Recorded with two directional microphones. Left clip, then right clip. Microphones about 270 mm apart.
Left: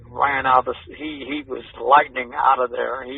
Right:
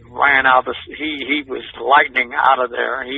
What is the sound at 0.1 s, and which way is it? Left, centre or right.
A man's voice, right.